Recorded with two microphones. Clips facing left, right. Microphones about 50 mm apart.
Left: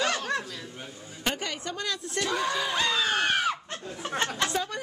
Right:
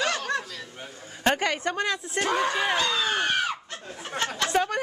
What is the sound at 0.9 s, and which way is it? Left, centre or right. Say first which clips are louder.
A man's voice: right 7 dB; right.